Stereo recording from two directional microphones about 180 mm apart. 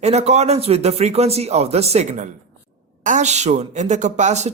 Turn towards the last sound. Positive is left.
turn(degrees=-40)  # may be behind; listen again after turning